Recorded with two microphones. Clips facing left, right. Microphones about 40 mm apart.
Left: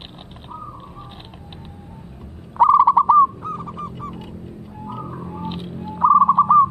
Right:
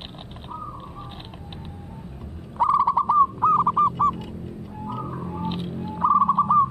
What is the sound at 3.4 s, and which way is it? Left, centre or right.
Owl, right.